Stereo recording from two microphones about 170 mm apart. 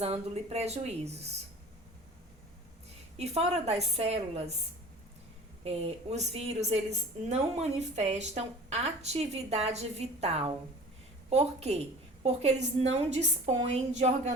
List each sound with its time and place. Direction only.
0.0 s a woman's voice: 40° right (ahead or behind)
3.2 s a woman's voice: 40° right (ahead or behind)
5.6 s a woman's voice: 35° right (ahead or behind)